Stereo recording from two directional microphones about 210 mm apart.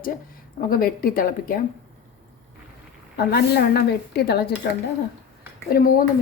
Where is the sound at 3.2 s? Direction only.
50° left (ahead or behind).